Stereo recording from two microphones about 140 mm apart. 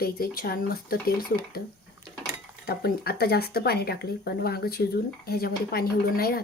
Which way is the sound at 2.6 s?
90° left.